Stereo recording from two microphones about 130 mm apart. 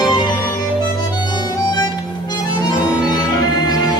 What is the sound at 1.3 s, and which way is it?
Harmonica, 35° left (ahead or behind).